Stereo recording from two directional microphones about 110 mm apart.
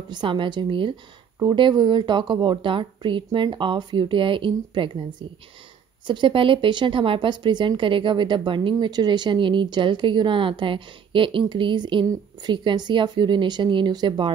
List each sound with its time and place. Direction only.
0.1 s a woman's voice: 45° right (ahead or behind)